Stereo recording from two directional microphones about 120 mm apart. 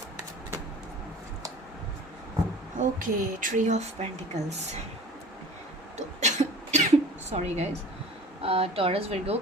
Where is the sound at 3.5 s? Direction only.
75° right (ahead or behind).